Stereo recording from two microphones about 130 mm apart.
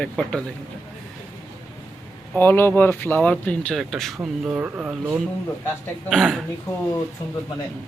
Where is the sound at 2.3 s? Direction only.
15° left (ahead or behind).